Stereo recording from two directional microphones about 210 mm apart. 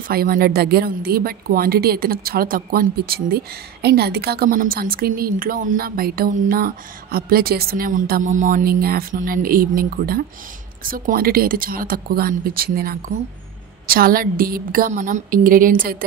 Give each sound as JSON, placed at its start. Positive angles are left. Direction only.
{"t": 0.1, "sound": "a woman's voice", "side_deg": -45}